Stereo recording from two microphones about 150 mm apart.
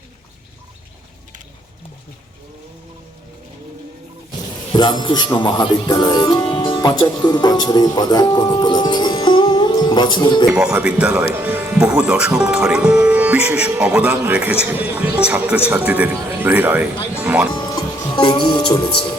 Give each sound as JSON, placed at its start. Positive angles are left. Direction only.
{"t": 4.7, "sound": "speech", "side_deg": 30}
{"t": 10.5, "sound": "speech", "side_deg": -10}
{"t": 17.5, "sound": "music", "side_deg": 30}